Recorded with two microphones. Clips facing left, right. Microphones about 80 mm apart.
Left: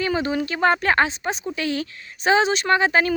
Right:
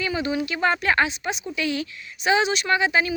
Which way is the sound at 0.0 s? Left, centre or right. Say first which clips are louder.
Left 2 dB; left.